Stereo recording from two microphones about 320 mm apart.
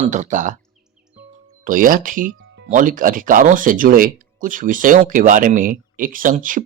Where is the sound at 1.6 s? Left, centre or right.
Right.